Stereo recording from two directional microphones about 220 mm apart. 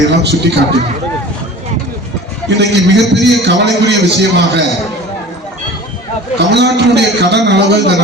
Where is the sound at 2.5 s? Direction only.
50° right (ahead or behind).